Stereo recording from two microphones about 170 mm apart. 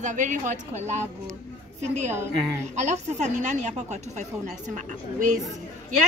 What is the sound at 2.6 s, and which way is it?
A woman's voice, 40° right (ahead or behind).